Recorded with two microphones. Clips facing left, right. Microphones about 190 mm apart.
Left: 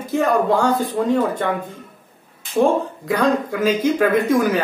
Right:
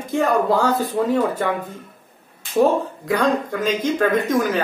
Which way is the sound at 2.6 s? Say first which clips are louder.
Even; centre (ahead or behind).